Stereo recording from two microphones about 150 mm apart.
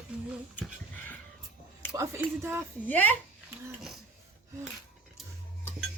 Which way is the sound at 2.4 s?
15° right (ahead or behind).